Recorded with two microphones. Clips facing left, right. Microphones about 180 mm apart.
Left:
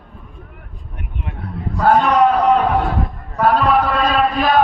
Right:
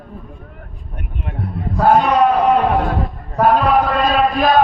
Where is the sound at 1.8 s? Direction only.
10° right (ahead or behind).